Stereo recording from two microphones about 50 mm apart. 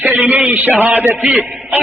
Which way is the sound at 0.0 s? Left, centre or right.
Right.